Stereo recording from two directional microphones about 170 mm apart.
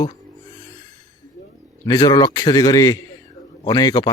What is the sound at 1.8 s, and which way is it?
Speech, 25° left (ahead or behind).